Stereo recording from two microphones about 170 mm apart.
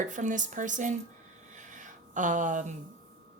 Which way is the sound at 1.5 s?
45° right (ahead or behind).